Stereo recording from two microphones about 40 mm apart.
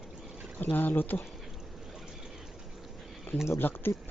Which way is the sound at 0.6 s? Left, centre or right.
Left.